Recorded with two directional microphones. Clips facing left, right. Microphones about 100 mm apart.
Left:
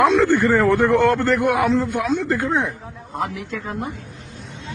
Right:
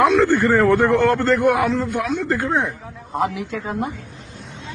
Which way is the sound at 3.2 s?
Centre (ahead or behind).